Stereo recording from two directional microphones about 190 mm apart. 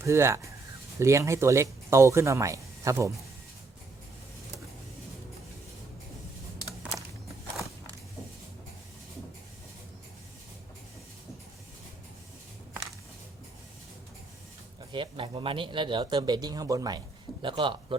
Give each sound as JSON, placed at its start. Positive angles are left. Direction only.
{"t": 0.0, "sound": "speech", "side_deg": -15}
{"t": 14.9, "sound": "speech", "side_deg": -25}